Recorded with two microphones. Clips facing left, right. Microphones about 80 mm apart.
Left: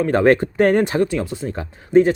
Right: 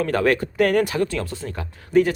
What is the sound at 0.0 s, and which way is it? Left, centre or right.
Speech, left.